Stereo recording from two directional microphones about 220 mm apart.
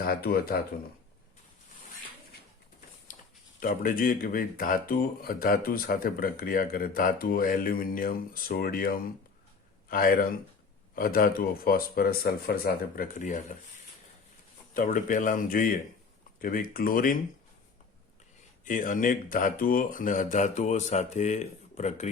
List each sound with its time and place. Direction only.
0.0 s speech: 45° left (ahead or behind)
3.6 s speech: 40° left (ahead or behind)
14.7 s speech: 35° left (ahead or behind)
18.6 s speech: 35° left (ahead or behind)